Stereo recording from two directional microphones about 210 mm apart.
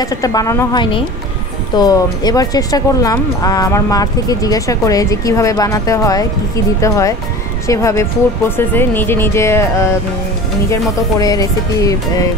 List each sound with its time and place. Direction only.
0.0 s speech: 15° left (ahead or behind)
10.7 s speech: 15° left (ahead or behind)